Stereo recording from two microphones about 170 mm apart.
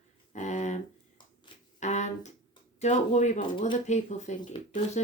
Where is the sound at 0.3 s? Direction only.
45° left (ahead or behind).